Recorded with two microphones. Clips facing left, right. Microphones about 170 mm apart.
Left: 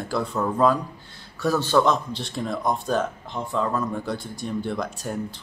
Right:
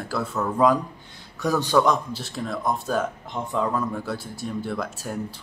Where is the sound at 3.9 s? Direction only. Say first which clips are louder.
Left 1 dB; 5° right (ahead or behind).